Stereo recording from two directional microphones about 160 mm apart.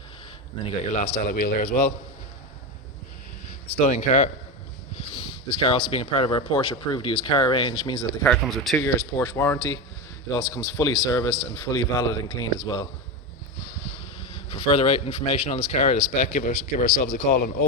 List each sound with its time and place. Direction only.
0.6 s speech: 45° left (ahead or behind)
1.3 s speech: 55° left (ahead or behind)
3.8 s speech: 45° left (ahead or behind); by 8.0 s 30° left (ahead or behind)
8.2 s speech: 5° left (ahead or behind)
8.8 s speech: 15° left (ahead or behind)
14.5 s speech: 35° left (ahead or behind); by 17.4 s 50° left (ahead or behind)